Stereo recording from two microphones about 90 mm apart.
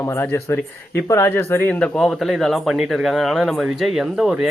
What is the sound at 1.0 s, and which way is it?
Speech, 30° left (ahead or behind).